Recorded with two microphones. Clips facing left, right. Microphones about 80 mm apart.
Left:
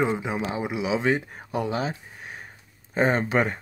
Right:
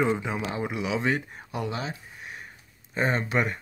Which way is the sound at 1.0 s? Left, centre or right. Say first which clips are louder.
Left 3 dB; left.